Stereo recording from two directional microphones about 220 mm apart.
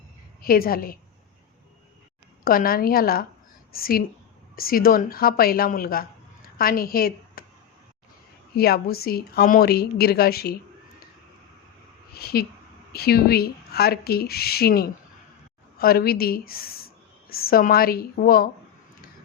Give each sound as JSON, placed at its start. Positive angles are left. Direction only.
{"t": 0.4, "sound": "speech", "side_deg": 40}
{"t": 2.4, "sound": "a woman's voice", "side_deg": 40}
{"t": 8.5, "sound": "a woman's voice", "side_deg": 45}
{"t": 12.1, "sound": "a woman's voice", "side_deg": 45}